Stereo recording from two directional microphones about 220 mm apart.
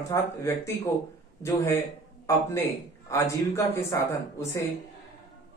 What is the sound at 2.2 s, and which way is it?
A man's voice, 15° left (ahead or behind).